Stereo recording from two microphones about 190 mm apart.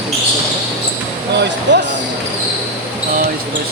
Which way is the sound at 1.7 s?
70° right (ahead or behind).